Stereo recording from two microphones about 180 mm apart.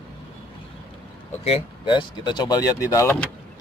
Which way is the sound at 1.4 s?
30° left (ahead or behind).